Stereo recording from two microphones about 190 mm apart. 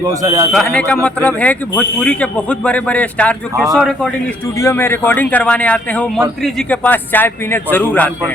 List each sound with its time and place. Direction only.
0.0 s speech: 20° right (ahead or behind)
0.5 s a man's voice: 5° left (ahead or behind)
4.5 s speech: 15° left (ahead or behind)